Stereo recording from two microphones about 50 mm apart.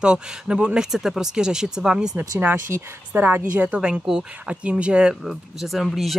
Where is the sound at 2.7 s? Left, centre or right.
Right.